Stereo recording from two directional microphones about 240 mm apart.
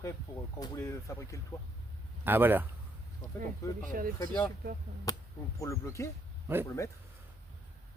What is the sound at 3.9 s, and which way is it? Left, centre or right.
Speech, right.